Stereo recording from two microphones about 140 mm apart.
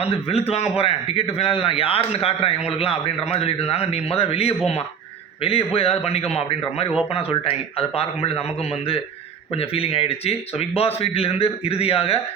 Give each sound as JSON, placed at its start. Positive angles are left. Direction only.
{"t": 0.0, "sound": "a man's voice", "side_deg": 45}
{"t": 9.6, "sound": "a man's voice", "side_deg": 45}